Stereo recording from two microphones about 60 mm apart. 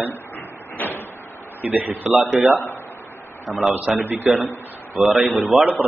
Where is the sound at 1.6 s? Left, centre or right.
Right.